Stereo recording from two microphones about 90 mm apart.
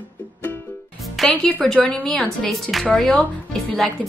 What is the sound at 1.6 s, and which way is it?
A woman's voice, 10° left (ahead or behind).